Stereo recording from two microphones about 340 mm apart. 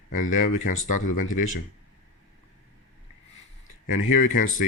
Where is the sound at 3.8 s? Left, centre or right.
Left.